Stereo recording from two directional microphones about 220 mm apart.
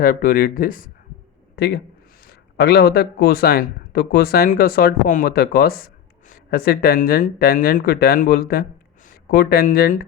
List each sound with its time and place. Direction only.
0.0 s speech: 40° left (ahead or behind)